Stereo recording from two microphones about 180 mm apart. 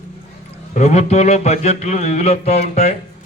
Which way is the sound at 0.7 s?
40° left (ahead or behind).